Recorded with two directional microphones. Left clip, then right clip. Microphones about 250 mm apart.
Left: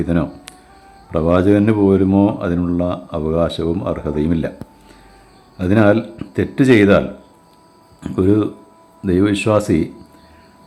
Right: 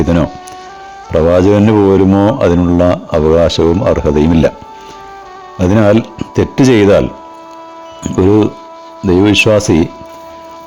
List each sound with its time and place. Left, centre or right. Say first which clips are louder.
0.0 s speech: right 7 dB; right
5.5 s speech: right 4 dB; right
8.0 s speech: right 6 dB; right